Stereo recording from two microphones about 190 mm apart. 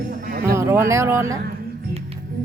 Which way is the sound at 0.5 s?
15° right (ahead or behind).